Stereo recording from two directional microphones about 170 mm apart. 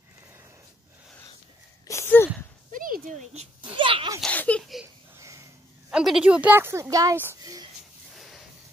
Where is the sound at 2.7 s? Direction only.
55° right (ahead or behind).